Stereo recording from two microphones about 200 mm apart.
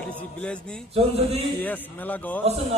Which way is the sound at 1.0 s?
30° right (ahead or behind).